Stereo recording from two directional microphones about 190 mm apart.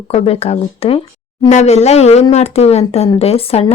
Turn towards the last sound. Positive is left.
turn(degrees=30)  # may be behind; listen again after turning